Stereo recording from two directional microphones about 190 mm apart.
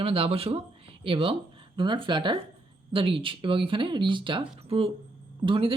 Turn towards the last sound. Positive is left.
turn(degrees=-25)  # may be behind; listen again after turning